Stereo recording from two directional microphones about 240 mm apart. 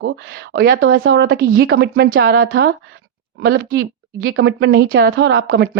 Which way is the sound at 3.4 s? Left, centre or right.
Right.